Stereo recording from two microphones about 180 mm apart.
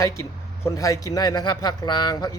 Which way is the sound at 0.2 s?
15° left (ahead or behind).